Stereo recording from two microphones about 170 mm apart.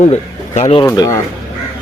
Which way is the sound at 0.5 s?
40° left (ahead or behind).